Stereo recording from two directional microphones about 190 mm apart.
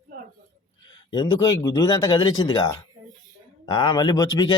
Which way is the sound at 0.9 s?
25° left (ahead or behind).